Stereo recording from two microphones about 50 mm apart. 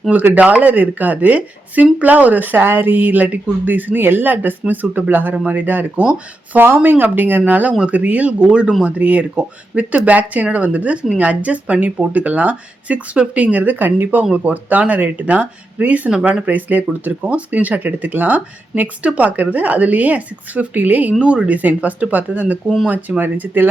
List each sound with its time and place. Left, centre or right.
0.1 s speech: right
6.0 s speech: right
7.0 s speech: right
7.7 s speech: right